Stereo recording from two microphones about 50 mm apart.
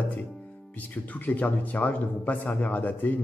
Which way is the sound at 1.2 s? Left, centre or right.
Left.